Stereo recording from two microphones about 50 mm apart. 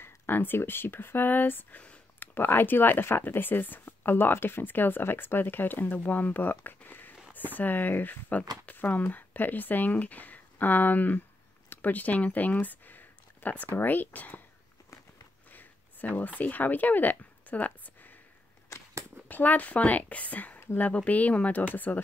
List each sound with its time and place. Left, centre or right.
0.0 s speech: left
15.5 s speech: left
19.2 s speech: left